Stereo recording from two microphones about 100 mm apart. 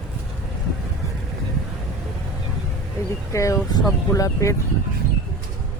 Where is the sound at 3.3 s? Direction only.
30° left (ahead or behind).